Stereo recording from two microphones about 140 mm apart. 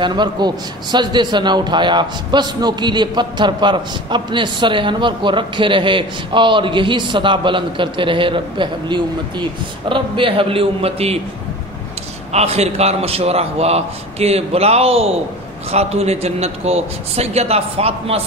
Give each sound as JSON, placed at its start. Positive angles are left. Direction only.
{"t": 0.0, "sound": "a man's voice", "side_deg": -30}
{"t": 12.3, "sound": "a man's voice", "side_deg": -50}